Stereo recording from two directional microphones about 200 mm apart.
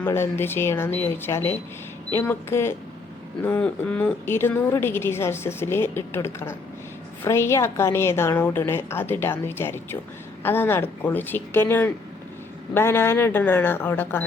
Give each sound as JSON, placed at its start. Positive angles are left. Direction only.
{"t": 0.0, "sound": "a woman's voice", "side_deg": 10}
{"t": 12.7, "sound": "a woman's voice", "side_deg": 10}